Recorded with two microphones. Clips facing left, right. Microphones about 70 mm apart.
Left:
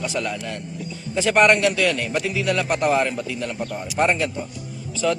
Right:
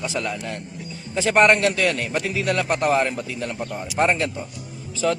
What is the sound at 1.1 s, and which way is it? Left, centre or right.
A man's voice, right.